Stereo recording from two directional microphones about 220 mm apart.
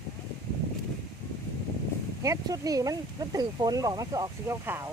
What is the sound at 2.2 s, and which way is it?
Speech, 15° right (ahead or behind).